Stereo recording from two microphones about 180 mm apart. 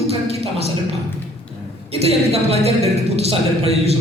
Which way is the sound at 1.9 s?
35° right (ahead or behind).